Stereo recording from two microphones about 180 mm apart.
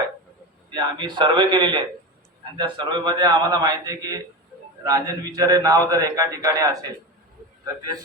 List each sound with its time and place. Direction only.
0.7 s a man's voice: 25° right (ahead or behind)